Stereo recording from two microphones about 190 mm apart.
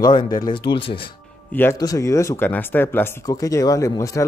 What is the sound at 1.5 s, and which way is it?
Speech, 10° left (ahead or behind).